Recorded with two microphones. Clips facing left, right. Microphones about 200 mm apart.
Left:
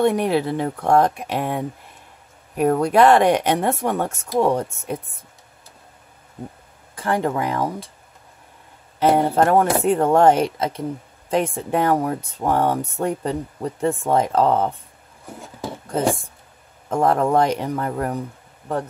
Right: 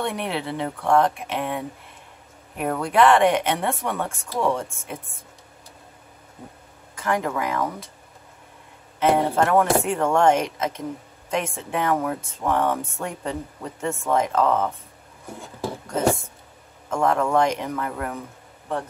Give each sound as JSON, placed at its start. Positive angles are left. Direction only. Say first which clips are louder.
{"t": 0.0, "sound": "speech", "louder": "left 9 dB", "side_deg": 40}
{"t": 7.0, "sound": "speech", "louder": "left 3 dB", "side_deg": 35}
{"t": 9.0, "sound": "speech", "louder": "left 3 dB", "side_deg": 35}
{"t": 15.9, "sound": "speech", "louder": "left 1 dB", "side_deg": 30}